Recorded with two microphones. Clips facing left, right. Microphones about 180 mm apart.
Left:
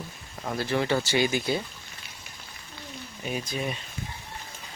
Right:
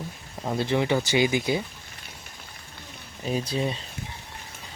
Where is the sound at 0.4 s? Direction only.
20° right (ahead or behind).